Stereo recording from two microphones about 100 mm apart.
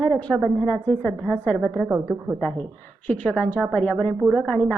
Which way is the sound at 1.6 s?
5° right (ahead or behind).